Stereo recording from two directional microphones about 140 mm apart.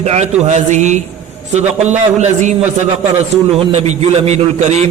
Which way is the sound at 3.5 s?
45° right (ahead or behind).